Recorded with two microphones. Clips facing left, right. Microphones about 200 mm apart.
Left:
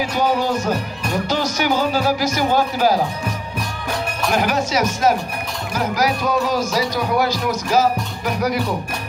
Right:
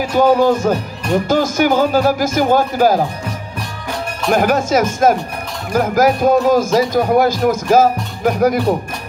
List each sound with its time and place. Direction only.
0.0 s speech: 50° right (ahead or behind)
4.3 s speech: 50° right (ahead or behind)